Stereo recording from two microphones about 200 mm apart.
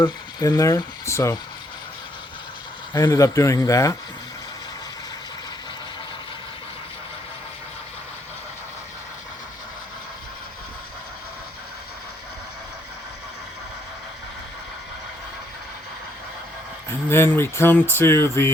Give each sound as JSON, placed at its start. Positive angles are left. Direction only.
{"t": 0.0, "sound": "speech", "side_deg": 20}
{"t": 2.9, "sound": "speech", "side_deg": 15}
{"t": 17.1, "sound": "speech", "side_deg": 10}